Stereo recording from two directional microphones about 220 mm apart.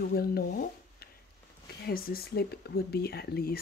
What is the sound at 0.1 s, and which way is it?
Speech, 45° left (ahead or behind).